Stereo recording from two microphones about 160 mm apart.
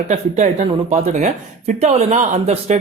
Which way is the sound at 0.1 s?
45° right (ahead or behind).